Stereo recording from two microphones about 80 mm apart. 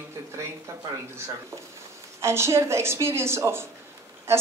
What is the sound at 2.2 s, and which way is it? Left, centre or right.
A woman's voice, right.